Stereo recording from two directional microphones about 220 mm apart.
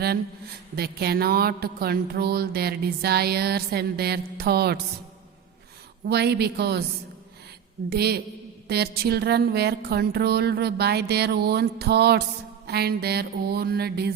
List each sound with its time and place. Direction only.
0.8 s music: 45° right (ahead or behind)
6.1 s music: 50° right (ahead or behind)
7.9 s music: 45° right (ahead or behind)